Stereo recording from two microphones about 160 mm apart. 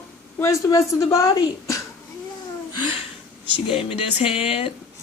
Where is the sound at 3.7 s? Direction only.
40° left (ahead or behind).